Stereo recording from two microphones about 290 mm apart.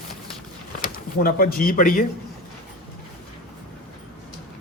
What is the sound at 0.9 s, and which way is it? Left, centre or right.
Speech, left.